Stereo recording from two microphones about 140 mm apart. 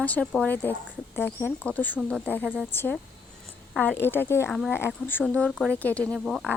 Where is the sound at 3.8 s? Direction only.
15° left (ahead or behind).